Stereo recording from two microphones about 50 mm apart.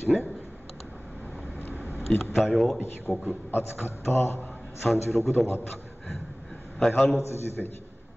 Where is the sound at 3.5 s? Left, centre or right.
Left.